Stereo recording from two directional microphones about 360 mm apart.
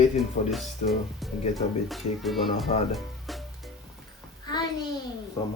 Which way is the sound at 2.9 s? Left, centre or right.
Centre.